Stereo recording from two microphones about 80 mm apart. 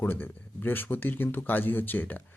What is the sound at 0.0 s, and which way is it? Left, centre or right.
A man's voice, left.